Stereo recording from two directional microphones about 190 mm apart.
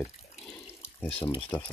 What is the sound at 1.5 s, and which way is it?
Speech, 5° left (ahead or behind).